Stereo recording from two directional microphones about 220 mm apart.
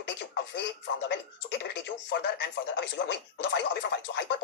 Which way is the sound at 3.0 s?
55° left (ahead or behind).